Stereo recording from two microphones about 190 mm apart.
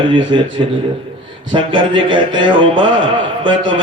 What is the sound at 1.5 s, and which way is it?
A man's voice, 25° right (ahead or behind).